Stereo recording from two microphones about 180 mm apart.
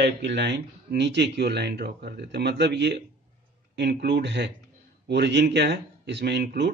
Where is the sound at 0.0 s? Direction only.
70° right (ahead or behind).